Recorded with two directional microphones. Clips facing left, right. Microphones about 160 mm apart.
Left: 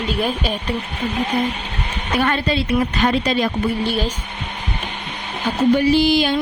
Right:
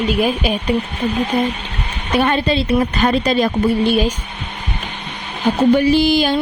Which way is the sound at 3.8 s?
20° right (ahead or behind).